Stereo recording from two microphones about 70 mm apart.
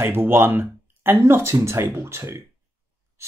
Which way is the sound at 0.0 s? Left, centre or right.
Right.